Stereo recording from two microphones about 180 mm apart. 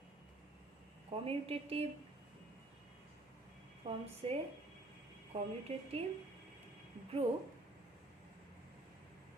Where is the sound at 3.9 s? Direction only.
30° right (ahead or behind).